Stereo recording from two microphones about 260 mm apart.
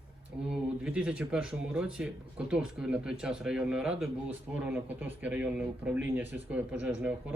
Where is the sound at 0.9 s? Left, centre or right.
Centre.